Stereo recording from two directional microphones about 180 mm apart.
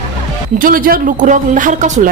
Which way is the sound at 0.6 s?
50° right (ahead or behind).